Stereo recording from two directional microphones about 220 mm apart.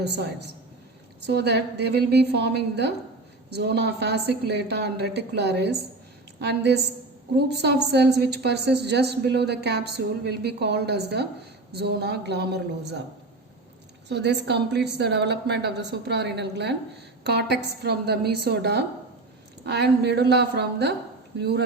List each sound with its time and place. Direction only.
0.0 s a woman's voice: 50° right (ahead or behind)
14.1 s a woman's voice: 50° right (ahead or behind)